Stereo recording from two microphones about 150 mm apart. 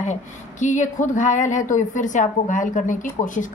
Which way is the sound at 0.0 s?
50° left (ahead or behind).